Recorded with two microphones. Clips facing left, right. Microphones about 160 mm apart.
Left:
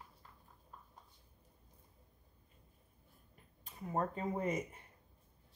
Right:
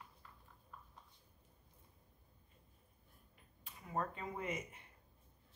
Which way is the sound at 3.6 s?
35° left (ahead or behind).